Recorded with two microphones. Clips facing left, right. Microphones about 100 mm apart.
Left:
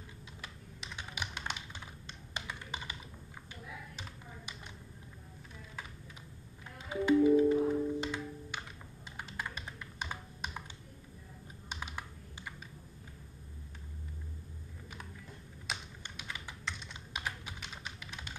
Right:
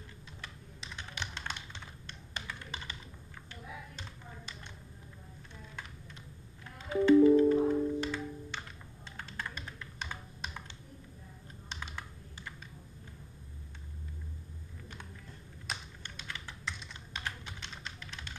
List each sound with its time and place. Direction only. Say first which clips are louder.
0.9 s typing: even; 10° left (ahead or behind)
2.0 s computer keyboard: even; 15° left (ahead or behind)
6.9 s music: right 4 dB; 10° left (ahead or behind)
9.1 s typing: even; 10° left (ahead or behind)
11.7 s computer keyboard: left 1 dB; 10° left (ahead or behind)
16.0 s typing: even; 10° left (ahead or behind)
16.6 s computer keyboard: even; centre (ahead or behind)
17.2 s typing: even; 10° left (ahead or behind)